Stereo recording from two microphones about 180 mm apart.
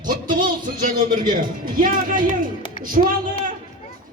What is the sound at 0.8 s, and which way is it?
A woman's voice, 50° right (ahead or behind).